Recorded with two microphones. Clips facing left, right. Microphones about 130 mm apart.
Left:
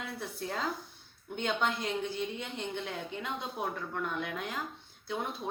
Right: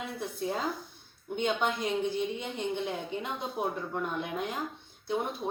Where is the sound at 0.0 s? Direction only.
15° right (ahead or behind).